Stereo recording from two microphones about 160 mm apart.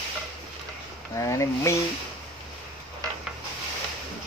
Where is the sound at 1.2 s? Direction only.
20° left (ahead or behind).